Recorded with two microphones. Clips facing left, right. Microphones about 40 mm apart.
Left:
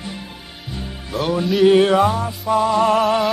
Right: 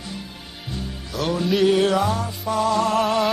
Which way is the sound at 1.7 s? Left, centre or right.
Left.